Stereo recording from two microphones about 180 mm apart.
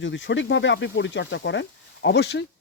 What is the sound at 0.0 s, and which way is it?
Speech, 90° left.